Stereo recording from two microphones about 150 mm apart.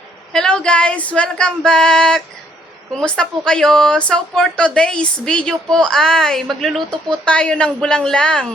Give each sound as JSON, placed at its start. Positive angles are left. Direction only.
{"t": 0.3, "sound": "speech", "side_deg": 5}